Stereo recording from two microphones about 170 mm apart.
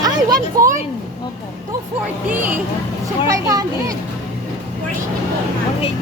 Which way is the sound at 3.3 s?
20° right (ahead or behind).